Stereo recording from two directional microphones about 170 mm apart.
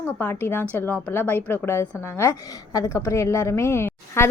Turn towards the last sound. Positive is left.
turn(degrees=15)  # may be behind; listen again after turning